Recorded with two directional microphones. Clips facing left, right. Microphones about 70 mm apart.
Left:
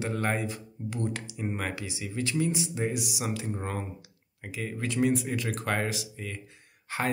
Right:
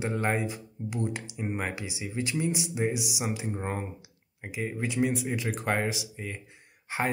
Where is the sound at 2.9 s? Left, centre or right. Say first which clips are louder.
Right 1 dB; centre.